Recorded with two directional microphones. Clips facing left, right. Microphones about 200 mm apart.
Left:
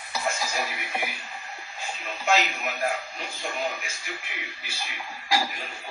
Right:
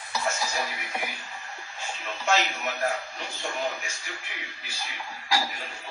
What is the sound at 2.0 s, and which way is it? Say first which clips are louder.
A man's voice: left 1 dB; 15° left (ahead or behind).